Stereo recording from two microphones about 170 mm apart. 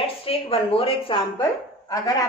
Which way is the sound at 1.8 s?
20° left (ahead or behind).